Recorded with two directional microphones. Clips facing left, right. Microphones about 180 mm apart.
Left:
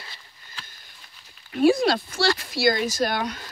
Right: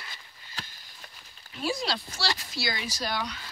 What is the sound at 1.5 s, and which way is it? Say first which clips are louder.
Speech: left 12 dB; 55° left (ahead or behind).